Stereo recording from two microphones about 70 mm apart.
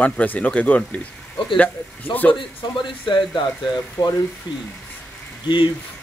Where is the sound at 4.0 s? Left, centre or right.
Left.